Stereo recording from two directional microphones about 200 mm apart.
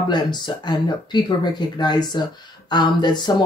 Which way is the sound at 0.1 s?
20° left (ahead or behind).